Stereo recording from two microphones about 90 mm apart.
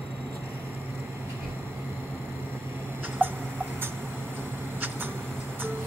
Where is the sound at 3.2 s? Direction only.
20° right (ahead or behind).